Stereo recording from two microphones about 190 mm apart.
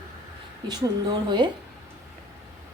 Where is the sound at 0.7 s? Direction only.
20° right (ahead or behind).